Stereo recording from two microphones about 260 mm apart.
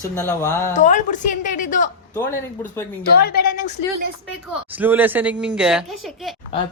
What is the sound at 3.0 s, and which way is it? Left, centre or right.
Speech, left.